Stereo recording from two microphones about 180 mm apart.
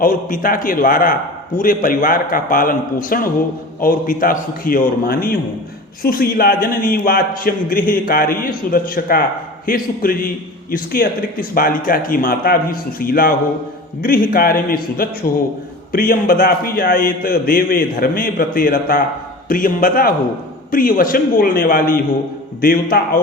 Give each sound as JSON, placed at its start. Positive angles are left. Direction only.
{"t": 0.0, "sound": "a man's voice", "side_deg": 50}